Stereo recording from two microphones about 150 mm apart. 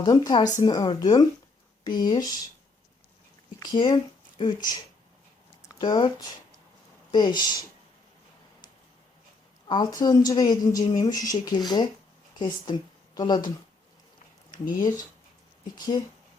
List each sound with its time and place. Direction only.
0.0 s a woman's voice: 25° left (ahead or behind)
3.6 s a woman's voice: 30° left (ahead or behind)
9.6 s a woman's voice: 30° left (ahead or behind)
14.8 s a woman's voice: 25° left (ahead or behind)